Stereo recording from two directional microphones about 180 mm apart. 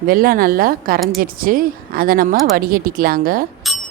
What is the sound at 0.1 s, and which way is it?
Speech, 55° right (ahead or behind).